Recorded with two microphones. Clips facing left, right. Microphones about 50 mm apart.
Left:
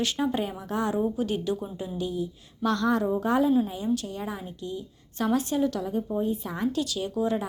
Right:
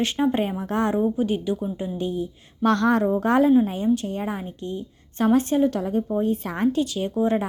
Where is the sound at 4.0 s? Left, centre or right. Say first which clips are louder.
Right 6 dB; right.